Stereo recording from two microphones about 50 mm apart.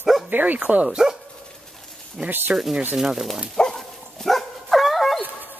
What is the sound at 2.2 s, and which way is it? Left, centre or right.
Speech, right.